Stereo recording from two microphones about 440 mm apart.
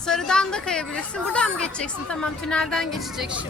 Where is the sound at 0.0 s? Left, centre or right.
Centre.